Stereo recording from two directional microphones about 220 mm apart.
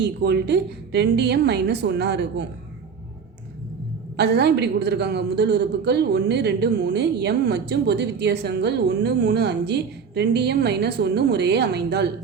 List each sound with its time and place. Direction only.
0.0 s a woman's voice: 50° right (ahead or behind)
4.2 s a woman's voice: 50° right (ahead or behind)